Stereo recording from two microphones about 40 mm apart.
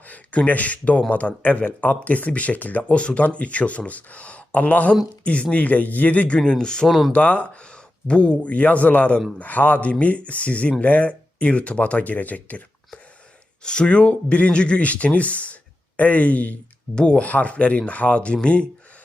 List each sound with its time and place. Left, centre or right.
0.1 s speech: left
2.9 s speech: left
6.4 s speech: centre
6.8 s speech: centre
7.1 s speech: left
13.7 s speech: left
16.9 s speech: left
17.2 s speech: left